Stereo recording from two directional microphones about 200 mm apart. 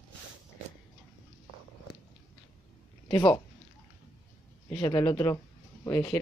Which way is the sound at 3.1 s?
20° left (ahead or behind).